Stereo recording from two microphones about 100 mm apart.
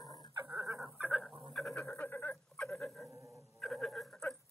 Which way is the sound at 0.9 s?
15° right (ahead or behind).